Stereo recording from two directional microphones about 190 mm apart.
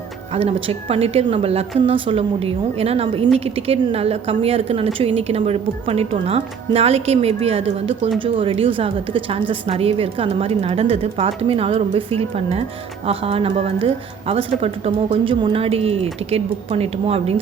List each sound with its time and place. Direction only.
0.3 s a woman's voice: 30° right (ahead or behind)